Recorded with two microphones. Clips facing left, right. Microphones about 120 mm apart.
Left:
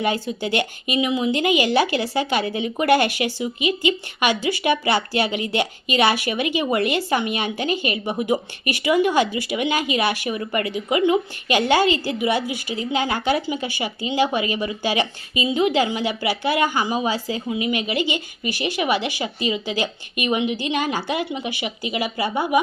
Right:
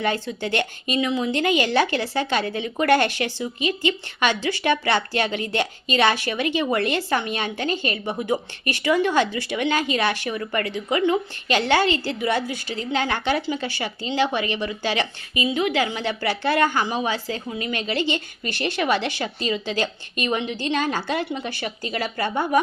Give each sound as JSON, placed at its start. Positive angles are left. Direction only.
{"t": 0.0, "sound": "speech", "side_deg": 10}
{"t": 15.4, "sound": "a woman's voice", "side_deg": 25}
{"t": 16.0, "sound": "speech", "side_deg": 10}